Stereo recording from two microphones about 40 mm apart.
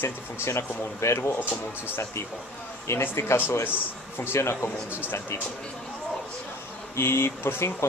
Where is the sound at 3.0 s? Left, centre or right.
Left.